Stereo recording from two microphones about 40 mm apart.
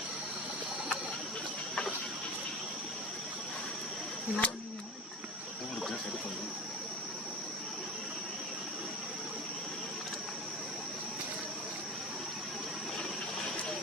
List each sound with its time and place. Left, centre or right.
4.4 s speech: left